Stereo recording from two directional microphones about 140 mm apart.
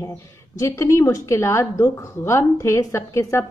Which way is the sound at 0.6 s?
20° left (ahead or behind).